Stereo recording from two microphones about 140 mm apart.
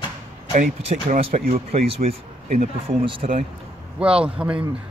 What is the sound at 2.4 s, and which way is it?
Speech, 70° right (ahead or behind).